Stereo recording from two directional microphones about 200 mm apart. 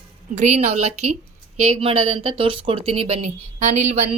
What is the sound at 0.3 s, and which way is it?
A woman's voice, 35° right (ahead or behind).